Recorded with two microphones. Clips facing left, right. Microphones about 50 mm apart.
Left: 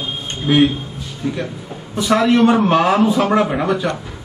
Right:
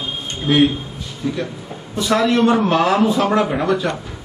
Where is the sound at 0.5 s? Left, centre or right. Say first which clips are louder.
Left 1 dB; left.